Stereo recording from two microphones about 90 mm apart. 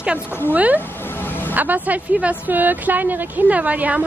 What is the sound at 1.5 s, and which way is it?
Speech, 20° right (ahead or behind).